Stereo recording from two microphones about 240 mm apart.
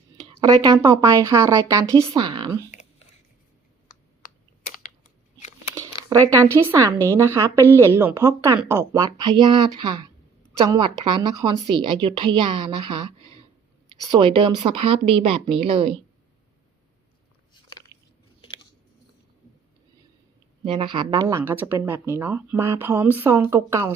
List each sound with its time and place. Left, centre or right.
0.4 s speech: centre
6.1 s speech: centre
14.1 s speech: right
17.5 s biting: centre
20.7 s speech: centre